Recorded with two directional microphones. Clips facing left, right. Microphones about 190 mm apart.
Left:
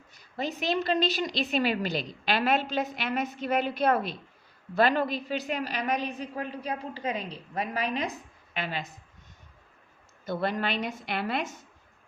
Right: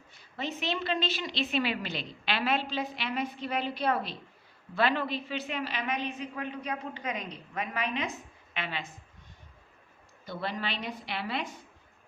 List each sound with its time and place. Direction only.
0.1 s a woman's voice: 40° left (ahead or behind)
10.2 s a woman's voice: 50° left (ahead or behind)